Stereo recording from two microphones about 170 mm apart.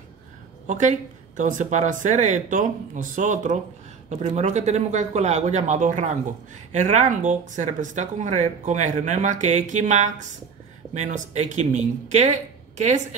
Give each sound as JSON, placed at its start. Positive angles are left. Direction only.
{"t": 0.7, "sound": "speech", "side_deg": -45}